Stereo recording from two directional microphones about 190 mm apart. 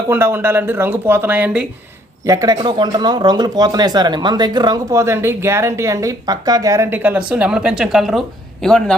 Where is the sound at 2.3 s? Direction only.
20° right (ahead or behind); by 8.9 s 5° left (ahead or behind).